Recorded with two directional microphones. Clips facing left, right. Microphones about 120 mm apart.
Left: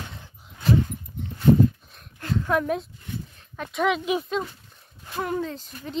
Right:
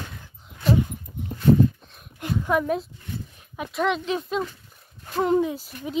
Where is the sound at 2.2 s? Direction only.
15° right (ahead or behind).